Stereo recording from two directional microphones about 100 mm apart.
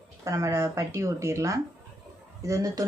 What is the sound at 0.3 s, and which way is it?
Speech, 30° right (ahead or behind).